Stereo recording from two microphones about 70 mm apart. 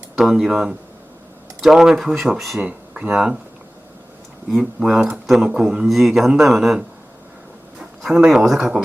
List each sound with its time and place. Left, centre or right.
0.2 s speech: centre
2.6 s speech: centre
4.4 s speech: centre